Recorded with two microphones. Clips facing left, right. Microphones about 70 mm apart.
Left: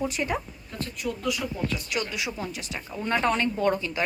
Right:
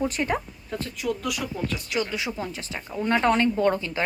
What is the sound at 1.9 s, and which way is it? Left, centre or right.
A woman's voice, right.